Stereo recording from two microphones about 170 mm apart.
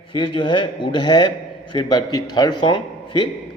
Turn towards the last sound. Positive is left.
turn(degrees=25)  # may be behind; listen again after turning